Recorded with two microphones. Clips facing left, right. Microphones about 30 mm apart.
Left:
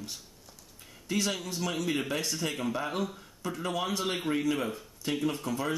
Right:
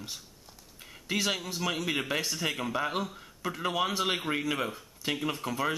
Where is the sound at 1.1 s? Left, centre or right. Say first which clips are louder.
Right 1 dB; right.